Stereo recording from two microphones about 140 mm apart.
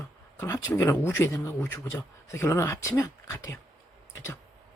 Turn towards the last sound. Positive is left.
turn(degrees=20)  # may be behind; listen again after turning